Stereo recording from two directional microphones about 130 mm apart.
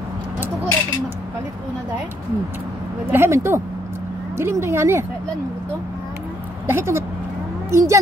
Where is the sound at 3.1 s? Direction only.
20° right (ahead or behind).